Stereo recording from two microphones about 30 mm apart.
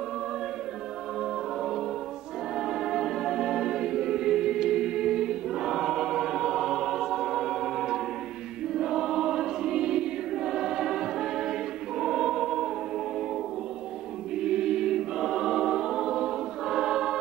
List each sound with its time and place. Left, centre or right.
2.5 s choir: centre
14.3 s choir: right